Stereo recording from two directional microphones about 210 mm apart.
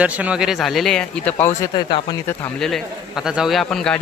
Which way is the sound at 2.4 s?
Centre (ahead or behind).